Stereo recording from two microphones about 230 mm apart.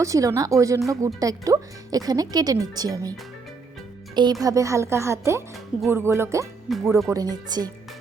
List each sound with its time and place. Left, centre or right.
0.0 s speech: centre
6.7 s speech: centre
7.1 s speech: centre